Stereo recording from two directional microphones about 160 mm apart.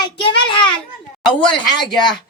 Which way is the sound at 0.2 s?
30° left (ahead or behind).